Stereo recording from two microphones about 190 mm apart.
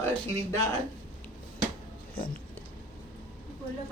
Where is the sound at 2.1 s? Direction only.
50° left (ahead or behind).